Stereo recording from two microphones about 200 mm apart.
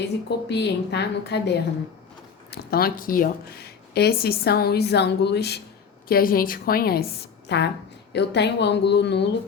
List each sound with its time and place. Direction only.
0.3 s a woman's voice: 60° left (ahead or behind)